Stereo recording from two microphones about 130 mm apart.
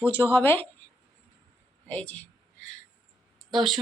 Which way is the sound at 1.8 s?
10° left (ahead or behind).